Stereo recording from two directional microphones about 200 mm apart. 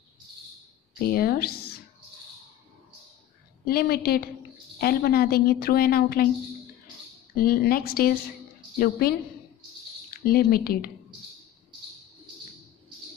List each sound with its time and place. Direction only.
0.9 s speech: 50° left (ahead or behind)
3.6 s a woman's voice: 50° left (ahead or behind)
7.3 s a woman's voice: 45° left (ahead or behind)
10.1 s a woman's voice: 50° left (ahead or behind)